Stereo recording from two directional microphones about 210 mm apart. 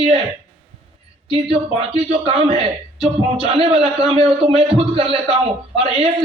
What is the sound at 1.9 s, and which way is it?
A man's voice, 30° right (ahead or behind).